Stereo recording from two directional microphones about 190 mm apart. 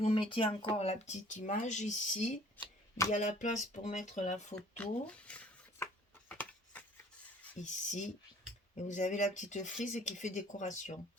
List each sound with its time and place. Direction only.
0.0 s speech: 30° left (ahead or behind)
4.8 s a sound: 5° left (ahead or behind)
7.6 s speech: 40° left (ahead or behind)